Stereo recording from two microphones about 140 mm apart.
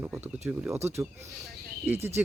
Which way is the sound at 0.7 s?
50° right (ahead or behind).